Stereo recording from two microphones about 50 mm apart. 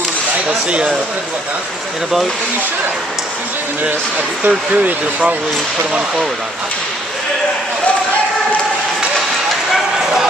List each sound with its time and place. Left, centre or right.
0.5 s speech: right
4.5 s speech: right